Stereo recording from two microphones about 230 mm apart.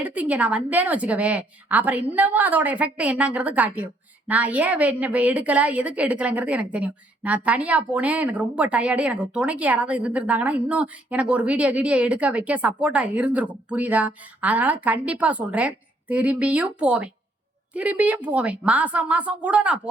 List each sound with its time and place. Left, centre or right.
0.0 s a woman's voice: centre